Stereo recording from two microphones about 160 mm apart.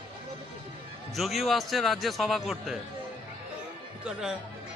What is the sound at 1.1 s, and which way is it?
A man's voice, centre (ahead or behind).